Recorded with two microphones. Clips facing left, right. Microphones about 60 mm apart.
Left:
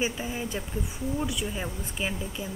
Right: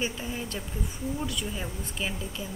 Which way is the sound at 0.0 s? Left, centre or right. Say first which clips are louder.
Left 2 dB; centre.